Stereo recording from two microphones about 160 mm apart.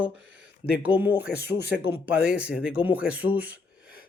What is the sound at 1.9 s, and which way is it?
Speech, 10° right (ahead or behind).